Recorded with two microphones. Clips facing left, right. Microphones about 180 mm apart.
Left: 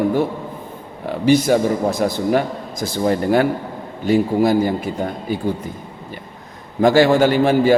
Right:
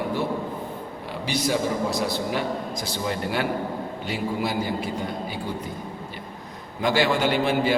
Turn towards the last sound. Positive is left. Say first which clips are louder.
# left 8 dB
turn(degrees=45)  # may be behind; listen again after turning